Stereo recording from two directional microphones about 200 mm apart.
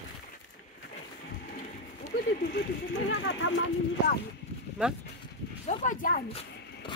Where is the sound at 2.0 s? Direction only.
50° left (ahead or behind).